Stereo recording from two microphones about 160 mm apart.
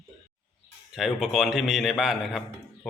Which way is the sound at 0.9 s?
Centre (ahead or behind).